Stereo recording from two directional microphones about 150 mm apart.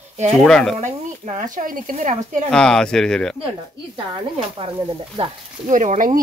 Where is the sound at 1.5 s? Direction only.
65° right (ahead or behind).